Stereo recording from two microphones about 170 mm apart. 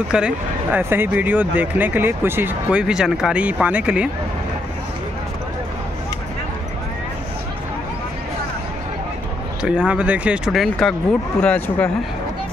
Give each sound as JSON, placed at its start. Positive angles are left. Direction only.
{"t": 0.1, "sound": "speech", "side_deg": -10}
{"t": 9.6, "sound": "speech", "side_deg": -5}